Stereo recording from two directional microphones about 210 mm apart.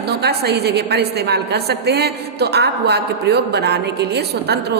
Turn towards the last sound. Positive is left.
turn(degrees=-50)  # may be behind; listen again after turning